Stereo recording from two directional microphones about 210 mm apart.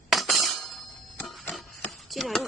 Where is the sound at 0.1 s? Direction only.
Centre (ahead or behind).